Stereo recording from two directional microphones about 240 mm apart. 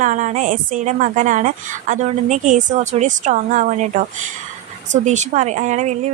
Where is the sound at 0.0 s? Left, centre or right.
Right.